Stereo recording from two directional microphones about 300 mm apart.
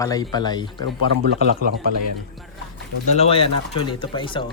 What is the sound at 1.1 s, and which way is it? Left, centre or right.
Speech, right.